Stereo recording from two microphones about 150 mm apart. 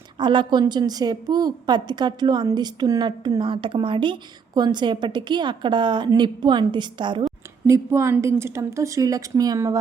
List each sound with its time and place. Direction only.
0.2 s a woman's voice: 30° right (ahead or behind)
7.7 s a woman's voice: 20° right (ahead or behind)